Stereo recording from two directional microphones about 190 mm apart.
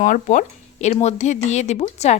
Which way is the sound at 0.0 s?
40° left (ahead or behind).